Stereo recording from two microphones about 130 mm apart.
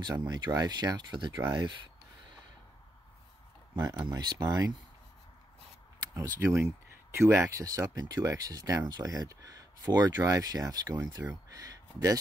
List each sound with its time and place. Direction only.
0.0 s speech: 30° right (ahead or behind)
3.7 s speech: 35° right (ahead or behind)
6.1 s speech: 25° right (ahead or behind)
11.4 s a sound: 25° right (ahead or behind)